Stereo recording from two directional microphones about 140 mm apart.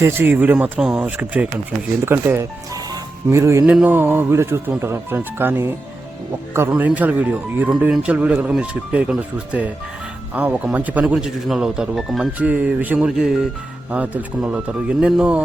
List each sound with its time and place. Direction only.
0.0 s speech: 15° right (ahead or behind)